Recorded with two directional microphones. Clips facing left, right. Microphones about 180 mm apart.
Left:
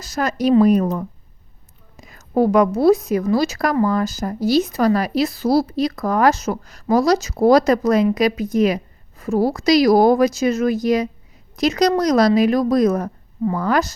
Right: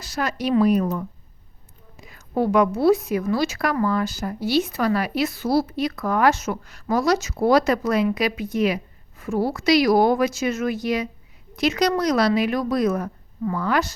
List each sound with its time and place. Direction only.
0.0 s a woman's voice: 45° left (ahead or behind)